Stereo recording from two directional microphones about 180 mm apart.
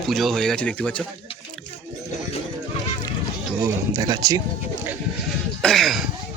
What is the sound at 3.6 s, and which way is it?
Speech, 20° right (ahead or behind).